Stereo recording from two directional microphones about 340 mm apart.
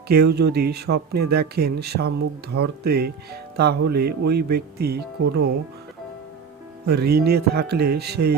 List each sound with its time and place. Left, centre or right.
0.1 s speech: right
6.8 s speech: right